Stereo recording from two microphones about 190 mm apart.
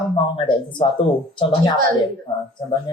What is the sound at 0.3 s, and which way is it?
Speech, 25° left (ahead or behind).